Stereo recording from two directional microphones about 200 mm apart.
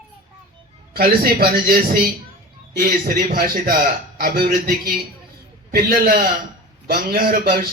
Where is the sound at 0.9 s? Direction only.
50° right (ahead or behind).